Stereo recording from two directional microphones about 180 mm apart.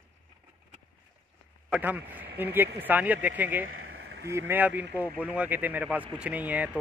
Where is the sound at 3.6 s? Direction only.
90° right.